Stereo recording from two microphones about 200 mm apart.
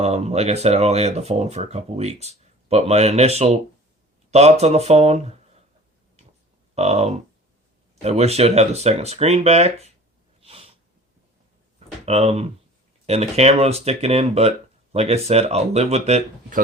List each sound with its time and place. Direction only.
0.0 s speech: 30° right (ahead or behind)
6.7 s speech: 30° right (ahead or behind)
10.4 s snort: 30° right (ahead or behind)
12.0 s speech: 30° right (ahead or behind)